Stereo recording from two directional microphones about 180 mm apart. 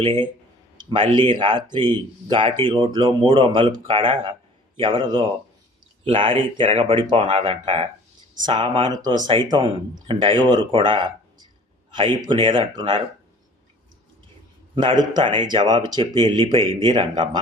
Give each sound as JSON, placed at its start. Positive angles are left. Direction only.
{"t": 0.0, "sound": "speech", "side_deg": -25}
{"t": 14.8, "sound": "speech", "side_deg": -25}